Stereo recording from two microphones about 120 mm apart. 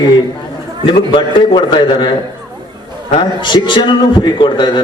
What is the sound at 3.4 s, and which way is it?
A man's voice, 40° left (ahead or behind).